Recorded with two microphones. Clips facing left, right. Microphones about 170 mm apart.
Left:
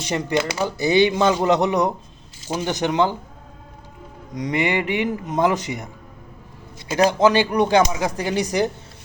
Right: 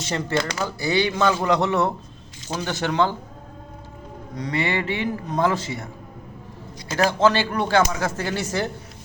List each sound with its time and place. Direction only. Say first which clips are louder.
0.1 s speech: left 3 dB; 15° left (ahead or behind)
4.4 s speech: left 3 dB; 15° left (ahead or behind)